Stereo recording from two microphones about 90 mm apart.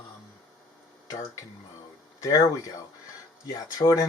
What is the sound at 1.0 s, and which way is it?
Speech, 35° left (ahead or behind).